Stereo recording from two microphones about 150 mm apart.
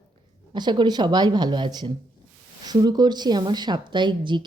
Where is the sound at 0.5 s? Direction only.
30° right (ahead or behind).